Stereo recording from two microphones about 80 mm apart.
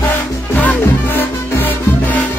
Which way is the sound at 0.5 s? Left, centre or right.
Left.